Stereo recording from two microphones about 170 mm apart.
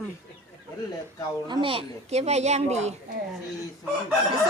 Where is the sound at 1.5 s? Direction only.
30° right (ahead or behind).